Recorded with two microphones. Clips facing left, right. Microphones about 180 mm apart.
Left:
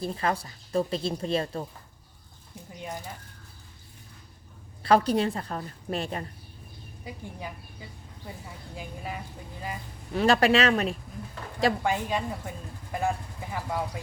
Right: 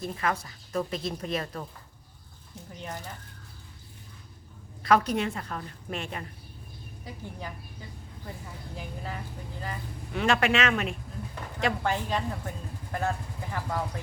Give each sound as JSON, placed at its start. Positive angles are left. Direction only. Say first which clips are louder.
{"t": 0.0, "sound": "speech", "louder": "left 2 dB", "side_deg": 30}
{"t": 2.7, "sound": "speech", "louder": "left 2 dB", "side_deg": 10}
{"t": 4.8, "sound": "a woman's voice", "louder": "left 2 dB", "side_deg": 30}
{"t": 7.0, "sound": "a woman's voice", "louder": "left 1 dB", "side_deg": 10}
{"t": 10.2, "sound": "a woman's voice", "louder": "left 4 dB", "side_deg": 35}
{"t": 11.8, "sound": "speech", "louder": "left 1 dB", "side_deg": 10}